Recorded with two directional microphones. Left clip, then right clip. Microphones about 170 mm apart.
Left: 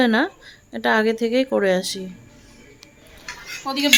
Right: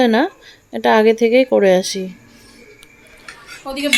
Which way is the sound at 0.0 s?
15° right (ahead or behind).